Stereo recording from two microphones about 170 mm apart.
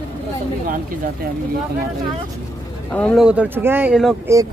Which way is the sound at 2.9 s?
5° left (ahead or behind).